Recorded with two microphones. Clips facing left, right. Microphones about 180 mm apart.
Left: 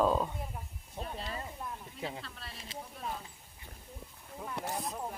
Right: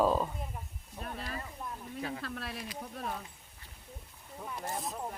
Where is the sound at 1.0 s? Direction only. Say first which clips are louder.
Left 1 dB; 25° left (ahead or behind).